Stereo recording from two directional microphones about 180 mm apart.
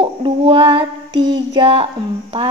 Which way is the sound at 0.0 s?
30° right (ahead or behind).